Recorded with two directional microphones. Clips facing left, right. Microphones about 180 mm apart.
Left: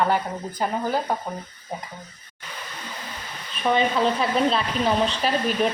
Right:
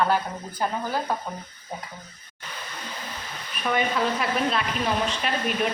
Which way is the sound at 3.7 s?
25° left (ahead or behind).